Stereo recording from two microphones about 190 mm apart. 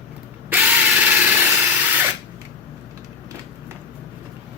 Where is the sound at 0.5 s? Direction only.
10° right (ahead or behind).